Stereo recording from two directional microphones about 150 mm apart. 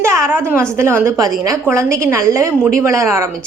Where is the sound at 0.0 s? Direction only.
15° right (ahead or behind).